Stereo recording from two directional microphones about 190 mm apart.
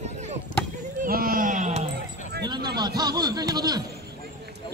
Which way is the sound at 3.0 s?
20° right (ahead or behind).